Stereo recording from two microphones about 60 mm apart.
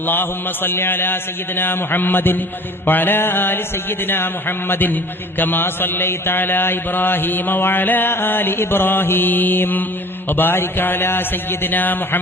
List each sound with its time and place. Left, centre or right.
0.0 s mantra: left